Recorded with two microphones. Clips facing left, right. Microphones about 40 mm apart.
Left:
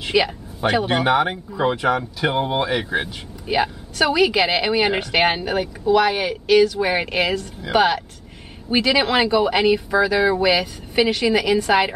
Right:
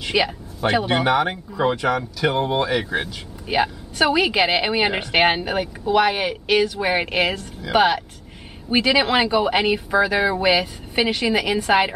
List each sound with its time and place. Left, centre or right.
0.1 s speech: centre
3.4 s a woman's voice: centre